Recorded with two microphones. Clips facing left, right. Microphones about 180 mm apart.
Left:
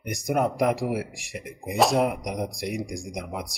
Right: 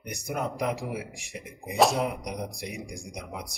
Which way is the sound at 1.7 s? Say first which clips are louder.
Left 2 dB; centre (ahead or behind).